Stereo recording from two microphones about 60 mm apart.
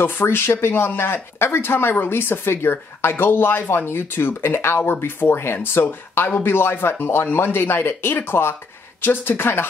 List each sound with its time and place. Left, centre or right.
0.0 s speech: left